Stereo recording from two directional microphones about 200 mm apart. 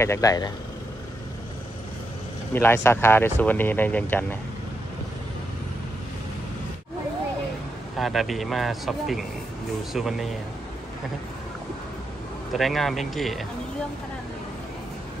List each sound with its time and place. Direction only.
0.0 s speech: 15° left (ahead or behind)
2.5 s speech: 10° left (ahead or behind)
8.0 s speech: centre (ahead or behind)
12.5 s speech: centre (ahead or behind)